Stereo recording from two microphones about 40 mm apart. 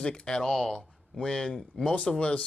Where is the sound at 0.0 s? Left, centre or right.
Left.